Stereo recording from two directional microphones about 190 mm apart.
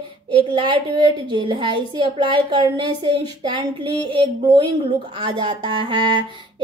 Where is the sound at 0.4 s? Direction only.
25° right (ahead or behind).